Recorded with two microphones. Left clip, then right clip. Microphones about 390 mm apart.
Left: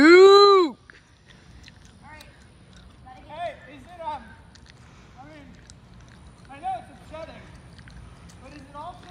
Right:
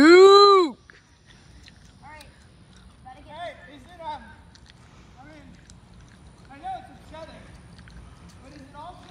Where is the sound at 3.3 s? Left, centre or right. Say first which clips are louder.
Left 4 dB; centre.